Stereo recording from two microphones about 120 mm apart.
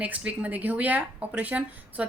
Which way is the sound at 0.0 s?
10° right (ahead or behind).